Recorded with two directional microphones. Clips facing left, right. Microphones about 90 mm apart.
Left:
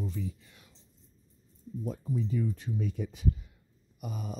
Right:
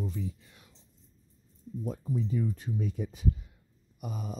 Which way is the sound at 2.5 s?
35° right (ahead or behind).